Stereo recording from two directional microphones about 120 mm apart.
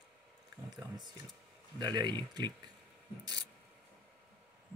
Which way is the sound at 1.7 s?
35° right (ahead or behind).